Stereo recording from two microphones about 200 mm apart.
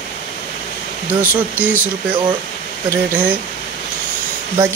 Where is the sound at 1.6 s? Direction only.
10° right (ahead or behind).